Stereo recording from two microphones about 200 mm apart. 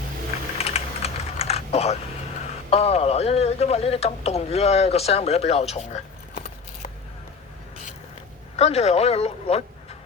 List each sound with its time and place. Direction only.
0.6 s typing: 30° left (ahead or behind)
2.6 s speech: 30° left (ahead or behind)
8.5 s speech: 30° left (ahead or behind)